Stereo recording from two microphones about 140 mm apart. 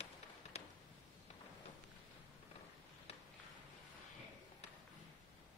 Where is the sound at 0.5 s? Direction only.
50° left (ahead or behind).